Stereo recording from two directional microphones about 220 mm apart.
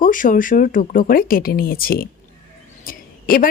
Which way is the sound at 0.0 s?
40° left (ahead or behind).